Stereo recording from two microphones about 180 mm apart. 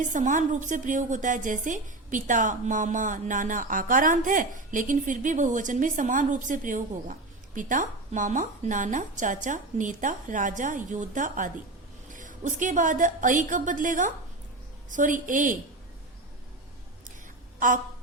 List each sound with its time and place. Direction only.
0.1 s a woman's voice: 45° right (ahead or behind)
17.6 s a woman's voice: 45° right (ahead or behind)